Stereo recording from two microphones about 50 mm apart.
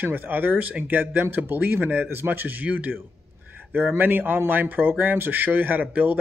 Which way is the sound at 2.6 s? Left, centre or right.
Right.